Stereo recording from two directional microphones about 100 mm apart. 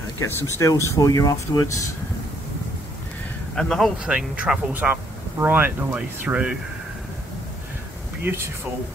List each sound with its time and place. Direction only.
0.6 s speech: 30° left (ahead or behind)
3.5 s speech: 5° left (ahead or behind)
4.0 s speech: 5° right (ahead or behind)
5.4 s speech: 20° right (ahead or behind)
8.3 s speech: 20° right (ahead or behind)